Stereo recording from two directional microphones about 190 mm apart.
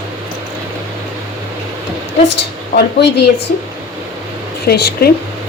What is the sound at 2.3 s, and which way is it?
Speech, 65° left (ahead or behind).